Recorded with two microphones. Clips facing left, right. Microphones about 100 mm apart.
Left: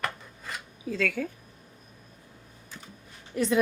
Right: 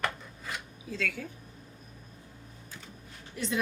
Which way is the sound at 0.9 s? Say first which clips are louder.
Left 6 dB; 55° left (ahead or behind).